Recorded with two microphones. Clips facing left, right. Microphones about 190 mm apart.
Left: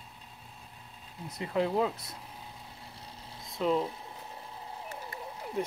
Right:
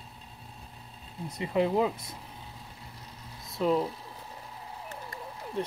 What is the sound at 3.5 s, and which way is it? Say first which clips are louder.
Speech: right 2 dB; centre (ahead or behind).